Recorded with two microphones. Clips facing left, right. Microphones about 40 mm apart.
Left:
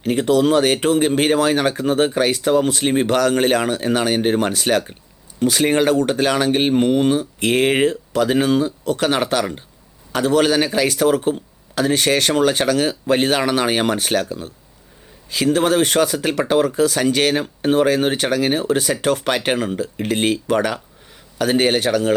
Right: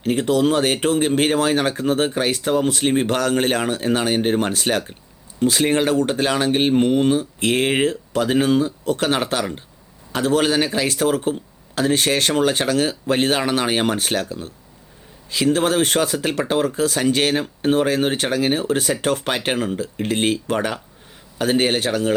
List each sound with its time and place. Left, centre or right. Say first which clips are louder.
0.0 s speech: left 2 dB; left
15.5 s speech: left 4 dB; left